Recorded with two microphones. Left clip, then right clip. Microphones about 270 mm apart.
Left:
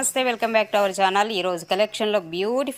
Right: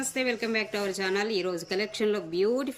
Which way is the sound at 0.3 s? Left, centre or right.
Left.